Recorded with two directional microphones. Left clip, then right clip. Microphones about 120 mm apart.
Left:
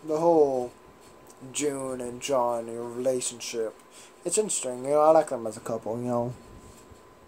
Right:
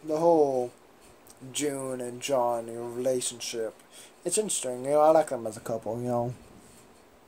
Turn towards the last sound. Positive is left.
turn(degrees=-10)  # may be behind; listen again after turning